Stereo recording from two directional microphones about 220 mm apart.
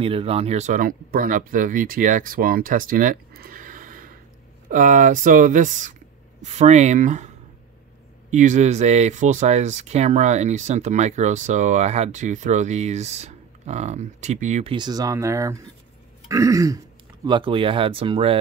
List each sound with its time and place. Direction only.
0.0 s speech: 25° right (ahead or behind)